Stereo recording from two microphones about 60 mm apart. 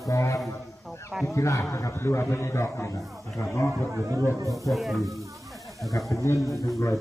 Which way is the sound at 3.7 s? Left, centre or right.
Right.